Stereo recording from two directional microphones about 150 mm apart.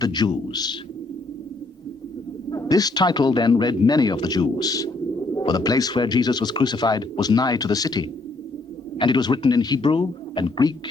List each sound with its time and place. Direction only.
0.0 s speech: 30° left (ahead or behind)
2.5 s speech: 25° left (ahead or behind)